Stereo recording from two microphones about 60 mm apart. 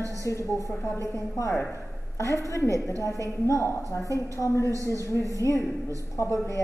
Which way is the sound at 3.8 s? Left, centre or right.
Left.